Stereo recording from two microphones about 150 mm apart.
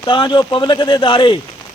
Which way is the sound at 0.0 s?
30° left (ahead or behind).